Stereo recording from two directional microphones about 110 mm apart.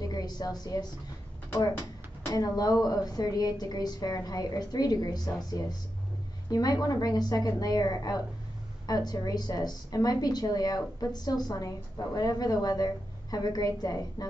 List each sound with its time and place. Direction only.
0.0 s a woman's voice: 35° left (ahead or behind)
2.3 s a woman's voice: 35° left (ahead or behind)